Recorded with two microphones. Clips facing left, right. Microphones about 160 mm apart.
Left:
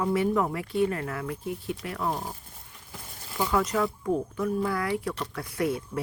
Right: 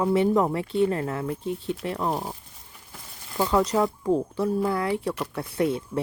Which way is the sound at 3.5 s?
25° right (ahead or behind).